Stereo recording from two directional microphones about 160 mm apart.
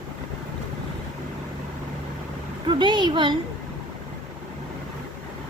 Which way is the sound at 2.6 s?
30° right (ahead or behind).